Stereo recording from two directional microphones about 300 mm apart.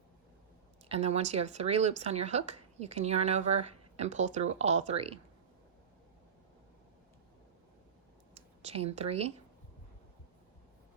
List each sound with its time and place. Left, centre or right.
0.9 s speech: right
8.4 s speech: centre